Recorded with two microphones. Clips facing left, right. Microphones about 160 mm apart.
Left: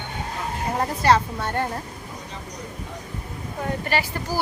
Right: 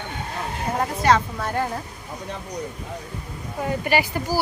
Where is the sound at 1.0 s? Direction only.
Centre (ahead or behind).